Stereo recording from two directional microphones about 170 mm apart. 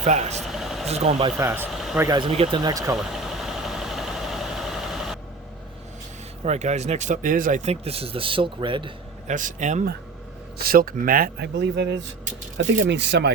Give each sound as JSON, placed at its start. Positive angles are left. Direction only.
{"t": 0.0, "sound": "speech", "side_deg": -40}
{"t": 0.4, "sound": "a sound", "side_deg": 0}
{"t": 0.9, "sound": "speech", "side_deg": -40}
{"t": 1.4, "sound": "speech", "side_deg": -15}
{"t": 1.7, "sound": "a sound", "side_deg": 0}
{"t": 2.0, "sound": "speech", "side_deg": -25}
{"t": 2.6, "sound": "speech", "side_deg": -20}
{"t": 2.9, "sound": "vehicle", "side_deg": 0}
{"t": 6.4, "sound": "speech", "side_deg": -40}
{"t": 9.2, "sound": "speech", "side_deg": -45}
{"t": 10.6, "sound": "speech", "side_deg": -60}